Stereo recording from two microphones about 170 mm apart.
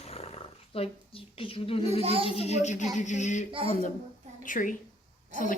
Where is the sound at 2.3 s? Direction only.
40° left (ahead or behind).